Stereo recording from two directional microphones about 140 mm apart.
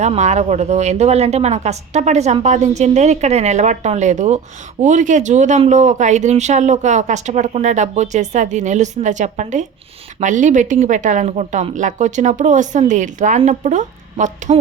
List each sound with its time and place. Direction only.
0.0 s speech: 55° right (ahead or behind)